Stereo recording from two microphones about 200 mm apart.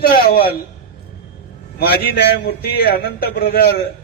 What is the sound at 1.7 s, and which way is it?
A man's voice, 50° left (ahead or behind).